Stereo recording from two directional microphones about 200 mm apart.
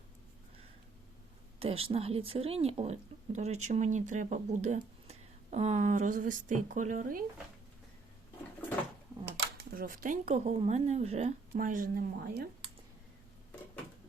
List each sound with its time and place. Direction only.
1.5 s speech: 30° right (ahead or behind)
9.6 s speech: 45° right (ahead or behind)
11.5 s speech: 40° right (ahead or behind)